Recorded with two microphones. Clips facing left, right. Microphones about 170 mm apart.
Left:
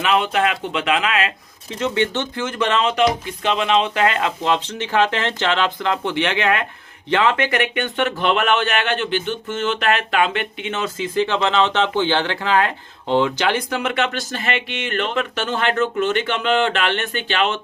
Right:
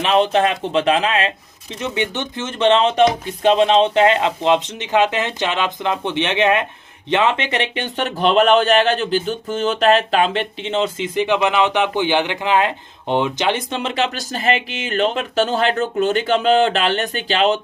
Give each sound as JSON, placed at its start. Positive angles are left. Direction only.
{"t": 0.0, "sound": "speech", "side_deg": -30}
{"t": 1.8, "sound": "speech", "side_deg": -20}